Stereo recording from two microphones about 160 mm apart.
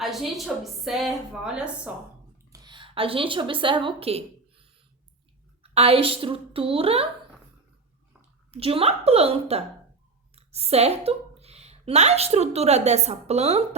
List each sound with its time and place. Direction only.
0.0 s a woman's voice: centre (ahead or behind)
2.5 s a woman's voice: 25° right (ahead or behind)
5.7 s a woman's voice: 40° right (ahead or behind)
8.4 s a woman's voice: 35° right (ahead or behind)